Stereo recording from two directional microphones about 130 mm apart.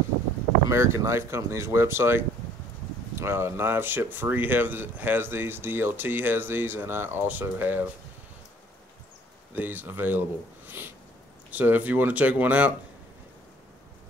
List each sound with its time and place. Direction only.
0.7 s speech: 20° right (ahead or behind)
9.5 s speech: 15° right (ahead or behind)
10.8 s a sound: 15° right (ahead or behind)
11.5 s speech: 15° right (ahead or behind)